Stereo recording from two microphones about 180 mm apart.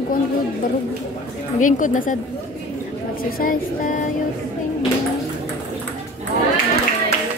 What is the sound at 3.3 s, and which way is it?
Speech, 50° left (ahead or behind).